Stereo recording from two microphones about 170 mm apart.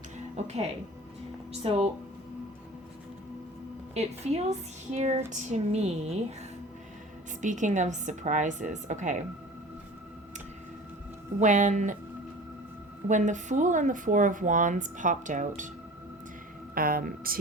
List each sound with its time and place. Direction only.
0.3 s a woman's voice: 40° right (ahead or behind)
3.9 s a woman's voice: 40° right (ahead or behind)
7.4 s speech: 45° right (ahead or behind)
11.3 s speech: 45° right (ahead or behind)
13.1 s speech: 45° right (ahead or behind)
16.7 s speech: 60° right (ahead or behind)